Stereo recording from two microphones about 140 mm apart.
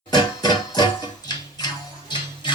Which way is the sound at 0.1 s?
30° left (ahead or behind).